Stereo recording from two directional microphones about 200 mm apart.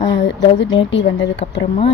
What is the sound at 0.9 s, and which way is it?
Speech, 65° left (ahead or behind).